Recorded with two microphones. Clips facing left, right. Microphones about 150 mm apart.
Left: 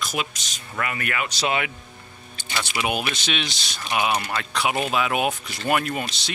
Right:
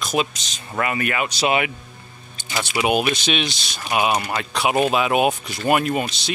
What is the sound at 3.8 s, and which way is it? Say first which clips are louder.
Speech: right 3 dB; 30° right (ahead or behind).